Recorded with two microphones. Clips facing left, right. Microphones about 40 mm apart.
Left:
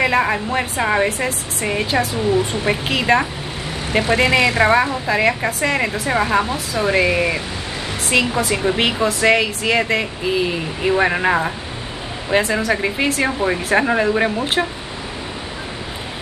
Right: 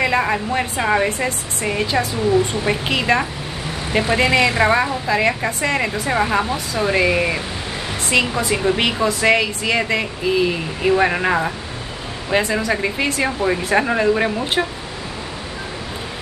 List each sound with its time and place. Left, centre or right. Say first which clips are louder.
0.0 s speech: left 1 dB; centre